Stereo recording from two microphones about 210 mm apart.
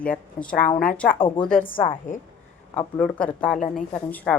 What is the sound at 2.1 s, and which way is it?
Speech, 40° left (ahead or behind).